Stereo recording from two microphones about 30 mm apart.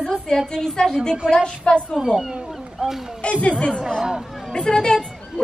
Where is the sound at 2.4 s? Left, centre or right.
Centre.